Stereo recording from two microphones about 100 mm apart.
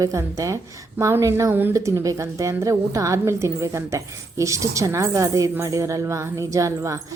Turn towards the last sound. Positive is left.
turn(degrees=-30)  # may be behind; listen again after turning